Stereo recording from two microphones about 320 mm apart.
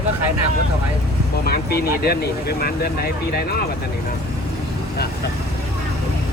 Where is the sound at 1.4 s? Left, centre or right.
Left.